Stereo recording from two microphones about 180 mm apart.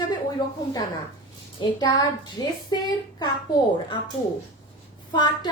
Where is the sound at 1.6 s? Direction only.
25° left (ahead or behind).